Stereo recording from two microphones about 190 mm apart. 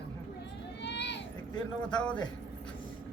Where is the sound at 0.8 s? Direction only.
65° left (ahead or behind).